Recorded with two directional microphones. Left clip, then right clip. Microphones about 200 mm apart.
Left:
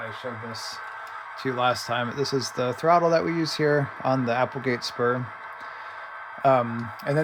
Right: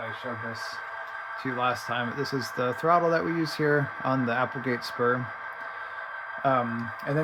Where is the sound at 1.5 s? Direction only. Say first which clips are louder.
Left 3 dB; 35° left (ahead or behind).